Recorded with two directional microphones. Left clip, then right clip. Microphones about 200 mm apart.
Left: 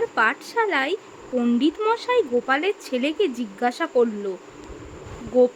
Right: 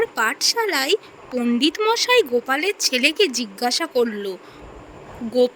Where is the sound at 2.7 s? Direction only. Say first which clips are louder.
Right 5 dB; 40° right (ahead or behind).